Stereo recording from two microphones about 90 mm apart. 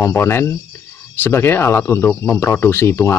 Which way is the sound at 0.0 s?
30° left (ahead or behind).